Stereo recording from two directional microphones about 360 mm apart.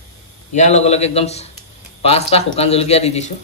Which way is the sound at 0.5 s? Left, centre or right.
Centre.